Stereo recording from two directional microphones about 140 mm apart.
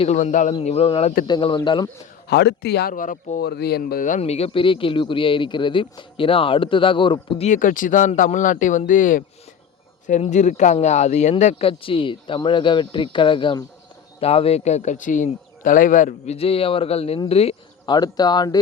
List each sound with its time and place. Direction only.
0.0 s speech: 55° left (ahead or behind)
0.6 s a man's voice: 45° left (ahead or behind)
2.8 s speech: 70° left (ahead or behind)
4.2 s a man's voice: 45° left (ahead or behind)
7.4 s speech: 65° left (ahead or behind)
10.1 s speech: 60° left (ahead or behind)
11.7 s a man's voice: 40° left (ahead or behind)
17.8 s speech: 30° left (ahead or behind)